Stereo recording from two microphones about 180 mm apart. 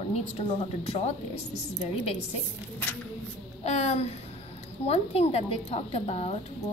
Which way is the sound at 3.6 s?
35° left (ahead or behind).